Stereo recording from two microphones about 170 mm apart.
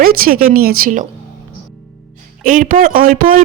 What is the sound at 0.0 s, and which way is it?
Speech, 60° right (ahead or behind).